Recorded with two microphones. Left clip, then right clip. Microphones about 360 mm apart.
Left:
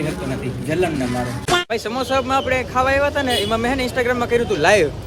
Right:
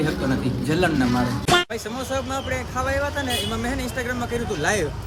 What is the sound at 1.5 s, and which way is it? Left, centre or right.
Speech, centre.